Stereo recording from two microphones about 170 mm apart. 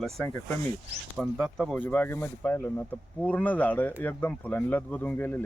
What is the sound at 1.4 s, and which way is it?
Speech, centre (ahead or behind).